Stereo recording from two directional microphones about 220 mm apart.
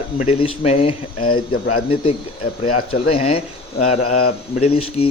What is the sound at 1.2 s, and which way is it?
Speech, 80° left.